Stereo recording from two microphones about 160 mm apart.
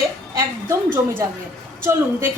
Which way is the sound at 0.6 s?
15° right (ahead or behind).